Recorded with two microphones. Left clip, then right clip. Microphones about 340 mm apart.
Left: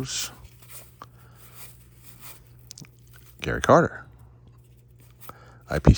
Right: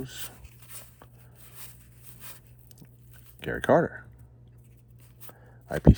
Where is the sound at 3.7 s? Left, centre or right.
Right.